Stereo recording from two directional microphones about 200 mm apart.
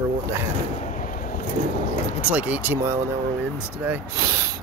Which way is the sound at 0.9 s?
40° left (ahead or behind).